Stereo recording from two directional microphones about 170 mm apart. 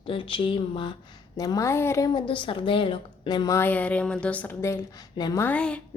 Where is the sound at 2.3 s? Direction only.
30° left (ahead or behind).